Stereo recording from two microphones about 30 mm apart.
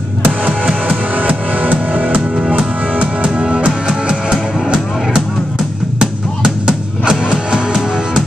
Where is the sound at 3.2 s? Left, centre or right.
Right.